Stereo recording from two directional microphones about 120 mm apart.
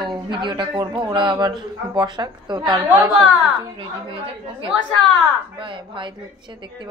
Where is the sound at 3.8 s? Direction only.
45° right (ahead or behind).